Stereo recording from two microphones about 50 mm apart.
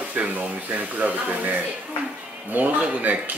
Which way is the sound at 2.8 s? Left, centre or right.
Right.